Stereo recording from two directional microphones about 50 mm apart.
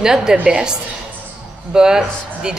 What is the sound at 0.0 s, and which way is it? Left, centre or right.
A woman's voice, centre.